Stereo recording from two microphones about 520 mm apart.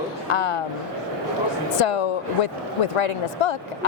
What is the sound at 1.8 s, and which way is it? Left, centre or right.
A woman's voice, left.